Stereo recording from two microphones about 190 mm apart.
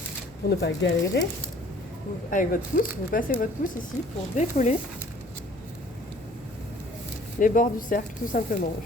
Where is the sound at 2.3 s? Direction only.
45° left (ahead or behind).